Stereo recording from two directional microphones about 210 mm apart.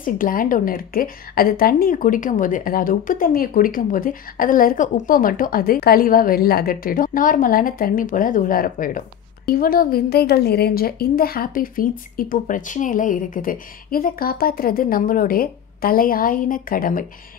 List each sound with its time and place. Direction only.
0.0 s a woman's voice: 40° left (ahead or behind)